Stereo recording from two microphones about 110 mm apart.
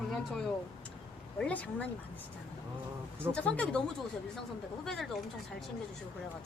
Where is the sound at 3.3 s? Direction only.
10° left (ahead or behind).